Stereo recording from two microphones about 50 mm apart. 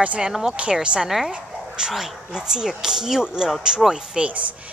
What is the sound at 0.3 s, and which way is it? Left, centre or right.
Speech, centre.